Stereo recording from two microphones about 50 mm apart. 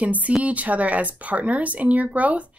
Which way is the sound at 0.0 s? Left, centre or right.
Right.